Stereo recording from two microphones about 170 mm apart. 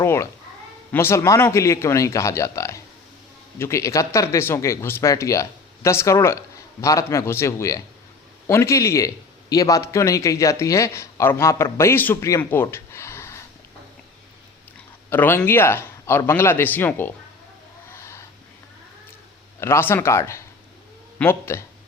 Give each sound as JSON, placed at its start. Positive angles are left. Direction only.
{"t": 0.0, "sound": "a man's voice", "side_deg": 15}
{"t": 15.1, "sound": "a man's voice", "side_deg": 10}
{"t": 17.9, "sound": "a sound", "side_deg": 15}
{"t": 19.5, "sound": "a man's voice", "side_deg": 15}